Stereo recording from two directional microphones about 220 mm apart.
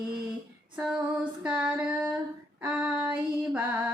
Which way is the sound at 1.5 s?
5° right (ahead or behind).